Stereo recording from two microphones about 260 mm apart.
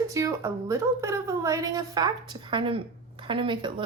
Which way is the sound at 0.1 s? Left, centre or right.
Centre.